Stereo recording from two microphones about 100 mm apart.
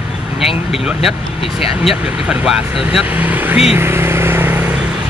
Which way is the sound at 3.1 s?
15° right (ahead or behind).